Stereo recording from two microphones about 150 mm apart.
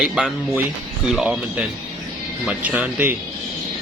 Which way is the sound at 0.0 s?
5° right (ahead or behind).